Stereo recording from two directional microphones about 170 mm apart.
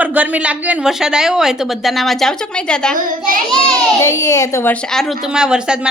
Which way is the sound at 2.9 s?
55° right (ahead or behind).